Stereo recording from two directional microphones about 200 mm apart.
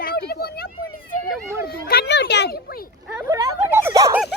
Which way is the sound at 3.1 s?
10° right (ahead or behind).